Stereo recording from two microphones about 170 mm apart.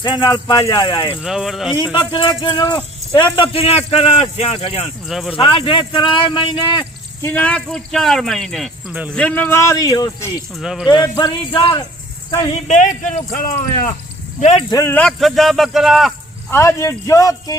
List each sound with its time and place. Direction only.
0.0 s speech: 25° left (ahead or behind)
1.2 s speech: 5° right (ahead or behind)
1.7 s speech: 25° left (ahead or behind)
5.0 s speech: centre (ahead or behind)
5.4 s speech: 30° left (ahead or behind)
7.2 s speech: 10° left (ahead or behind)
8.9 s speech: 10° right (ahead or behind)
9.1 s speech: 10° left (ahead or behind)
10.5 s speech: centre (ahead or behind)
11.2 s speech: 30° left (ahead or behind)
12.6 s speech: 45° left (ahead or behind)
14.7 s speech: 15° left (ahead or behind)
15.0 s speech: centre (ahead or behind)
16.5 s speech: 15° left (ahead or behind)